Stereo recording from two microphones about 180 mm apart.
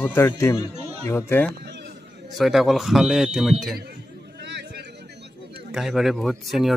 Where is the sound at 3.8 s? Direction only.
65° right (ahead or behind).